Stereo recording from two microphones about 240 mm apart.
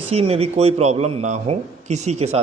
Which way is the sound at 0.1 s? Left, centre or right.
Right.